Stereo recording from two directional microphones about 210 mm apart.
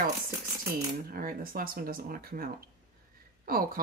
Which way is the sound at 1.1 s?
45° right (ahead or behind).